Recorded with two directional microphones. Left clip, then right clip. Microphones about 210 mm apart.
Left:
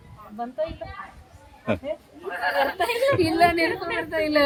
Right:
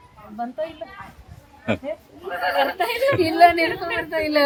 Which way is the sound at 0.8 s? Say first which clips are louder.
Right 1 dB; 5° left (ahead or behind).